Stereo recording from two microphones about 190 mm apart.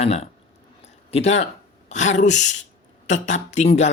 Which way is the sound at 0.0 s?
35° left (ahead or behind).